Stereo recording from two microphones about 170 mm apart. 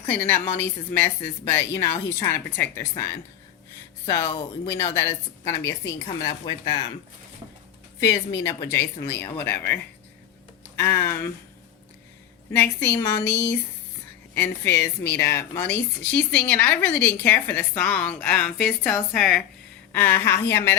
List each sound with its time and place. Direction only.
0.1 s a woman's voice: 10° left (ahead or behind)
4.0 s a woman's voice: 15° left (ahead or behind)
6.2 s speech: 30° left (ahead or behind)
8.3 s a woman's voice: 15° left (ahead or behind)
10.8 s a woman's voice: 15° left (ahead or behind)
12.5 s a woman's voice: 15° left (ahead or behind)
14.3 s a woman's voice: 15° left (ahead or behind)